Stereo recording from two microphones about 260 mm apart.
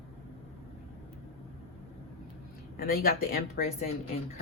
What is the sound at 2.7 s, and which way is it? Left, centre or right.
Speech, left.